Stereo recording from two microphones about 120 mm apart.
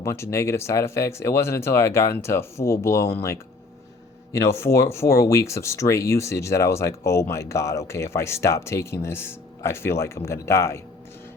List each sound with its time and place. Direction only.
0.0 s speech: 25° left (ahead or behind)